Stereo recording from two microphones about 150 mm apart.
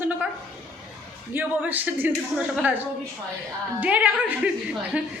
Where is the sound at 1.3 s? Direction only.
10° right (ahead or behind).